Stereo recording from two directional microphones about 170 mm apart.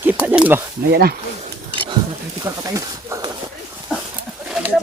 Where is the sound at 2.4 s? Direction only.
20° right (ahead or behind).